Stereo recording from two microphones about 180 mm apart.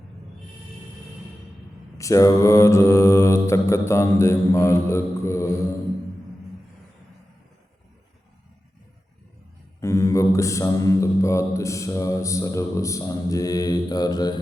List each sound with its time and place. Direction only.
2.0 s mantra: 20° left (ahead or behind)
9.8 s mantra: 15° left (ahead or behind)